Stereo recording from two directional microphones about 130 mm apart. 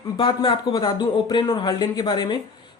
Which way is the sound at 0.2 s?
40° left (ahead or behind).